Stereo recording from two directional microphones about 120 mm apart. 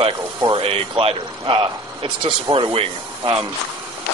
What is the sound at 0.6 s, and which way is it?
Speech, 50° right (ahead or behind).